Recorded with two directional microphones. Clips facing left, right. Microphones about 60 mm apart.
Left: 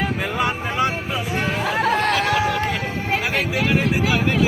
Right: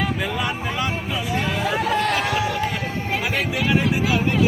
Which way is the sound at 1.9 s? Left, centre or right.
Left.